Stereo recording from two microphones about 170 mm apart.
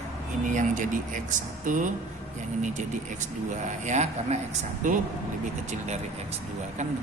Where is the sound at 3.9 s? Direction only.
45° right (ahead or behind).